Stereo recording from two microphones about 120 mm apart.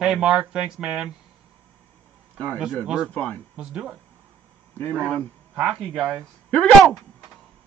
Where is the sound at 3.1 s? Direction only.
10° left (ahead or behind).